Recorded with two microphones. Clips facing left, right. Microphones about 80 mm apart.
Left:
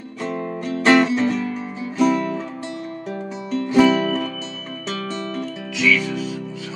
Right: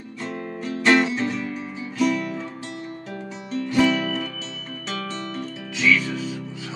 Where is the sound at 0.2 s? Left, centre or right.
Left.